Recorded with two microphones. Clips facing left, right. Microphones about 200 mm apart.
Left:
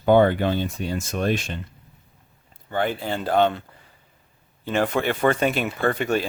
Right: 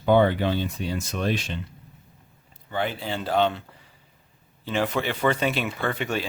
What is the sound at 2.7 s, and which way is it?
Speech, 50° left (ahead or behind).